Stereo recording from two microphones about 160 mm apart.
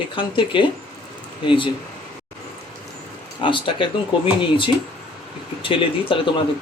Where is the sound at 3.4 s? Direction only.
30° left (ahead or behind).